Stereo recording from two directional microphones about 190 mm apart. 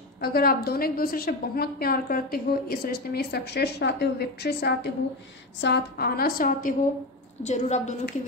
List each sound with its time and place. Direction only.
0.2 s a woman's voice: 50° left (ahead or behind)
7.4 s a woman's voice: 35° left (ahead or behind)